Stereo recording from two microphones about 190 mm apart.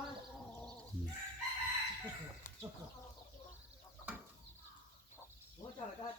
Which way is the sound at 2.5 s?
45° left (ahead or behind).